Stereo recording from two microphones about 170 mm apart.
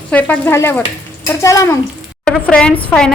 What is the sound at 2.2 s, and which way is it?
Speech, 5° left (ahead or behind).